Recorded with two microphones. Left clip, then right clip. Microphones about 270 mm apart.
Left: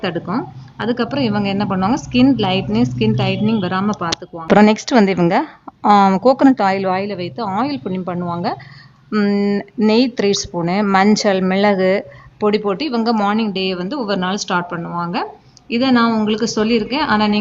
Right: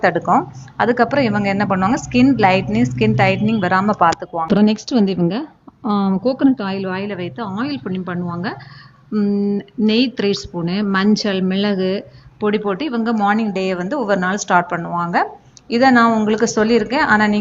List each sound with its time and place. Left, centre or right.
0.0 s a woman's voice: centre
4.4 s a woman's voice: left
5.8 s speech: left
6.2 s a woman's voice: left
9.1 s a woman's voice: left; by 17.3 s centre